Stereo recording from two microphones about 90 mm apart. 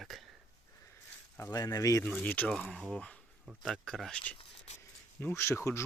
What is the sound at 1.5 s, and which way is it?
Speech, 40° left (ahead or behind).